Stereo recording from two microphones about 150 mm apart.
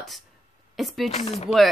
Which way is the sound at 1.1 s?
45° left (ahead or behind).